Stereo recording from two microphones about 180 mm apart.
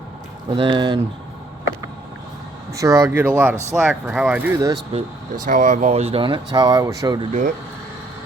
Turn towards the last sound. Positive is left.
turn(degrees=-45)  # may be behind; listen again after turning